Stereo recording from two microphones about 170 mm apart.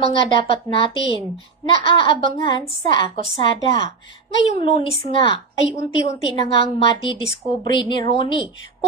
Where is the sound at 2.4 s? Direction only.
25° left (ahead or behind).